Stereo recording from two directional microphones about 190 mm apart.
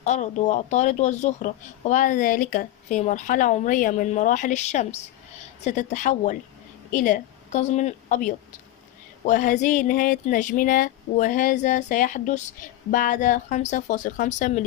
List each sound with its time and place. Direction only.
0.0 s a woman's voice: 40° left (ahead or behind)